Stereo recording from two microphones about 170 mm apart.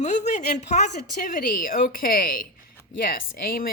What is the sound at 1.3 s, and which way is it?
A woman's voice, 55° left (ahead or behind).